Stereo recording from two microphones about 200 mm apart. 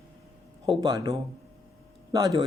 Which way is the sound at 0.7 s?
20° right (ahead or behind).